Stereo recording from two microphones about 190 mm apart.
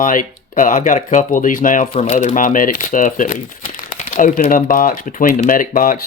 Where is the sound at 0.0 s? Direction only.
45° left (ahead or behind).